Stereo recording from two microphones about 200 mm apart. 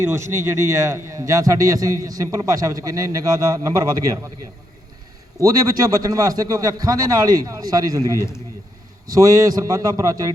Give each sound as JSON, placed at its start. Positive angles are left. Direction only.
{"t": 0.0, "sound": "a man's voice", "side_deg": -15}
{"t": 5.4, "sound": "a man's voice", "side_deg": -15}
{"t": 8.1, "sound": "a man's voice", "side_deg": 15}
{"t": 9.1, "sound": "a man's voice", "side_deg": -15}